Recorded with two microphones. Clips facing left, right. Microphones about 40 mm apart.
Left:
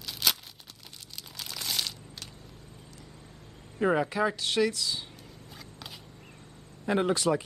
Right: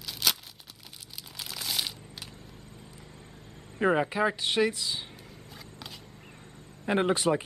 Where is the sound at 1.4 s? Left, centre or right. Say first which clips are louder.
Even; centre.